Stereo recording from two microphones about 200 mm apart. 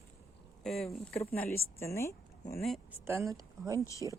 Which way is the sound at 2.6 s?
Centre (ahead or behind).